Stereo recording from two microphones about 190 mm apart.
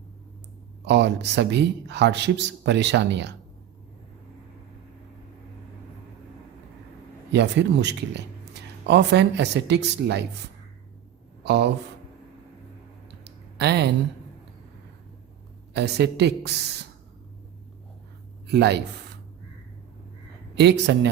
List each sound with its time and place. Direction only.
0.9 s speech: 65° right (ahead or behind)
7.3 s speech: 65° right (ahead or behind)
13.2 s a sound: 60° right (ahead or behind)
15.7 s speech: 60° right (ahead or behind)
18.4 s speech: 60° right (ahead or behind)
20.6 s speech: 65° right (ahead or behind)